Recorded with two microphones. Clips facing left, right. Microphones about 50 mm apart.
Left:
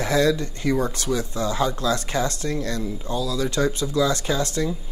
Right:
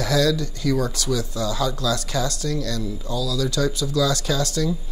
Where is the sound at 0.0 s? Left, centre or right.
Left.